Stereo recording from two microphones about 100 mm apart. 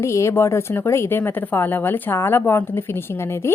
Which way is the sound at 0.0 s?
30° left (ahead or behind).